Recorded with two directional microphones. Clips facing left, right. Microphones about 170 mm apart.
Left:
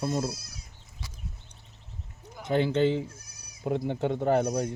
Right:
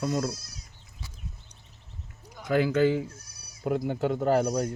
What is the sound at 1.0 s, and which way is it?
Horse, 90° left.